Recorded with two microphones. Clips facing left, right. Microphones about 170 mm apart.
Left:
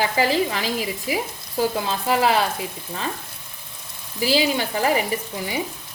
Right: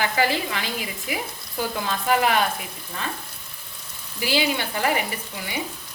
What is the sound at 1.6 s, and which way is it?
Speech, 30° left (ahead or behind).